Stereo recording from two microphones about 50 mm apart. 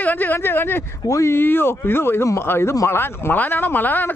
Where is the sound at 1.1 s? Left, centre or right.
Left.